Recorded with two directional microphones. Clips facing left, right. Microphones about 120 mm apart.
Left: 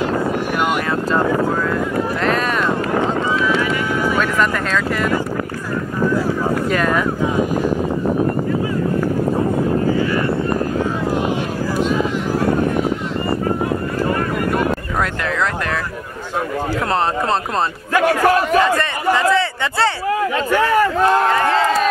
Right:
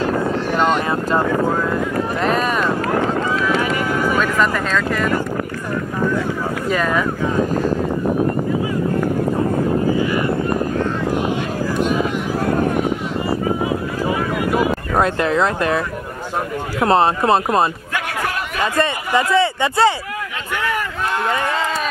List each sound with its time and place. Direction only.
3.5 s clip-clop: 40° right (ahead or behind)
4.4 s speech: centre (ahead or behind)
6.7 s speech: centre (ahead or behind)
14.0 s vehicle: 5° right (ahead or behind)
15.0 s speech: 25° right (ahead or behind)
16.8 s speech: 20° right (ahead or behind)
17.9 s a man's voice: 35° left (ahead or behind)
18.8 s a sound: 20° right (ahead or behind)
20.5 s speech: 35° left (ahead or behind)